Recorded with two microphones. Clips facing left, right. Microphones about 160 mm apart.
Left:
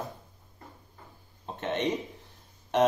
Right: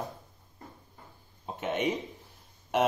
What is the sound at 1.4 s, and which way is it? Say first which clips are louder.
Speech: even; 10° right (ahead or behind).